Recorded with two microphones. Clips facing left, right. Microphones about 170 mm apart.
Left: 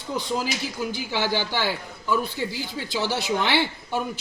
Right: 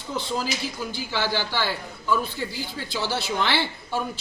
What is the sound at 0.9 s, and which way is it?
A man's voice, 15° left (ahead or behind).